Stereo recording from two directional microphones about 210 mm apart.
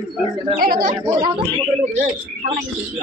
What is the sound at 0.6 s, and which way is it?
Speech, 45° right (ahead or behind).